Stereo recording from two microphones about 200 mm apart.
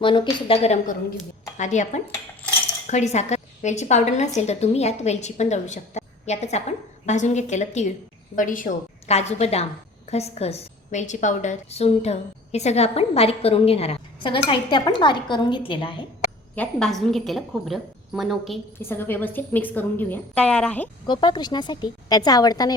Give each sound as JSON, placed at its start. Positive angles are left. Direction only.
{"t": 0.0, "sound": "a woman's voice", "side_deg": 25}
{"t": 16.6, "sound": "a woman's voice", "side_deg": 0}
{"t": 18.8, "sound": "a woman's voice", "side_deg": 10}
{"t": 21.1, "sound": "speech", "side_deg": 20}